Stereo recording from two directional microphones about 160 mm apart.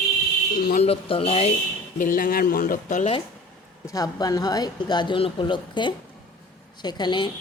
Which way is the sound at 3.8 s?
20° left (ahead or behind).